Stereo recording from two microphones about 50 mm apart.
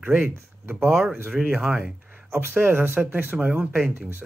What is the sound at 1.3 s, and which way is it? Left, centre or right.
Speech, right.